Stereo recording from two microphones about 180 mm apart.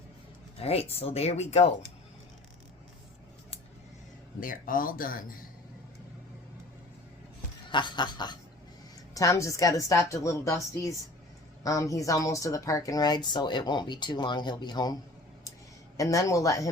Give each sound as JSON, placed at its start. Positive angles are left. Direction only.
{"t": 0.6, "sound": "speech", "side_deg": 35}
{"t": 4.4, "sound": "speech", "side_deg": 50}
{"t": 7.7, "sound": "a woman's voice", "side_deg": 25}
{"t": 16.0, "sound": "a woman's voice", "side_deg": 20}